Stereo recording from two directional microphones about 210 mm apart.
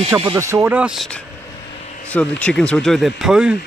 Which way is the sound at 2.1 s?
5° left (ahead or behind).